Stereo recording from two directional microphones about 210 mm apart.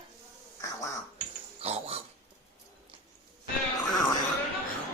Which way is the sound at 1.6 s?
30° right (ahead or behind).